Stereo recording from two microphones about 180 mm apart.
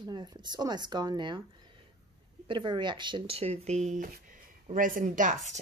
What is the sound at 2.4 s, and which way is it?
Speech, 25° right (ahead or behind).